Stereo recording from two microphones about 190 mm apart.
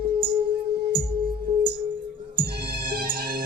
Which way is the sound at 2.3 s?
55° right (ahead or behind).